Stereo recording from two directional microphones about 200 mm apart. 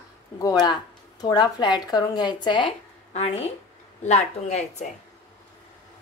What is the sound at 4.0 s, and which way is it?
Speech, 35° left (ahead or behind).